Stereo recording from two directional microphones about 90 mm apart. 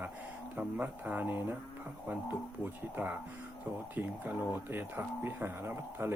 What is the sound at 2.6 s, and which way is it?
Speech, 20° right (ahead or behind).